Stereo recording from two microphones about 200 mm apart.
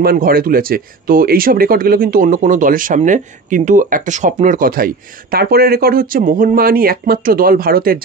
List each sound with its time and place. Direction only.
0.0 s speech: 50° right (ahead or behind)